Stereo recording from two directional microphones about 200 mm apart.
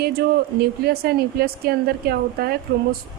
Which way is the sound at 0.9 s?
50° right (ahead or behind).